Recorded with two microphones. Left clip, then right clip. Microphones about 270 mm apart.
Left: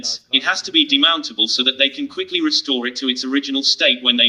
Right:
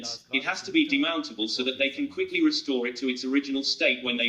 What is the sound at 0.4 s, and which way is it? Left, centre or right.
Speech, left.